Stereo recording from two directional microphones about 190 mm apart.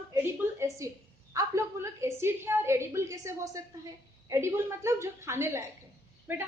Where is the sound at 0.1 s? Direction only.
15° right (ahead or behind).